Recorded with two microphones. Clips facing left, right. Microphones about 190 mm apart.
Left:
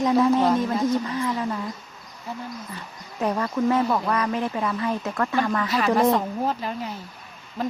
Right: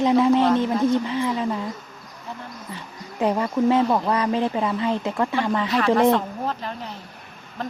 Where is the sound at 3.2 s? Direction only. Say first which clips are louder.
Right 3 dB; 20° right (ahead or behind).